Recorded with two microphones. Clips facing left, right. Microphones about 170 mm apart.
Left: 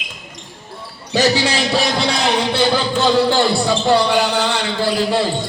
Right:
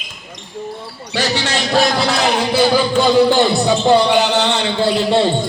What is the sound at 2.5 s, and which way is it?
A man's voice, 10° right (ahead or behind).